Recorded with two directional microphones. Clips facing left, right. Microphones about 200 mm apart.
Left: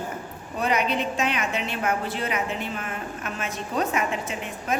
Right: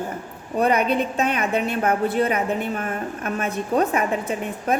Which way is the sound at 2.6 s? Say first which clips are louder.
Right 6 dB; 50° right (ahead or behind).